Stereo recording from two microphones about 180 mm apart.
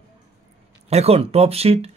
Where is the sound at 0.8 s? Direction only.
35° right (ahead or behind).